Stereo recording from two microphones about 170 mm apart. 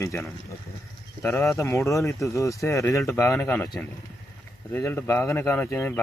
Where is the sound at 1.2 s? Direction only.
15° left (ahead or behind).